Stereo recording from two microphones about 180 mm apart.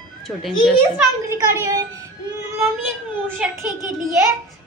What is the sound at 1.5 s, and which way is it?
Speech, 20° right (ahead or behind).